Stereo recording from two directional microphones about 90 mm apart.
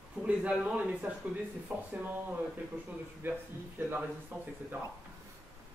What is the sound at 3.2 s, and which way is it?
Speech, 25° right (ahead or behind).